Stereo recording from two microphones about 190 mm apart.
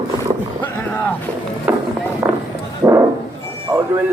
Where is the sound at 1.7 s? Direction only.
5° right (ahead or behind).